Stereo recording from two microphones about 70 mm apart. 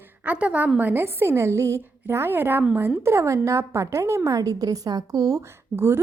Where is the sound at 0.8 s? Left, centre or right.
Right.